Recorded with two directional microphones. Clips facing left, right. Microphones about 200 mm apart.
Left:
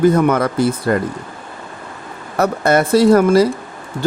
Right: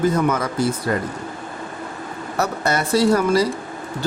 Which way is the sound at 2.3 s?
55° left (ahead or behind).